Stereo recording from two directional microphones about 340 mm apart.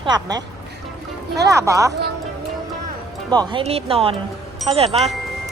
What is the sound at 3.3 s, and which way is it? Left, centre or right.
Speech, centre.